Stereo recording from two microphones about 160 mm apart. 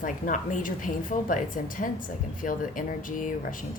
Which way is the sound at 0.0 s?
55° left (ahead or behind).